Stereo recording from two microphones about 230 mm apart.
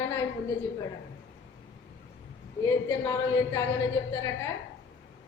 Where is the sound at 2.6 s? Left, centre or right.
Centre.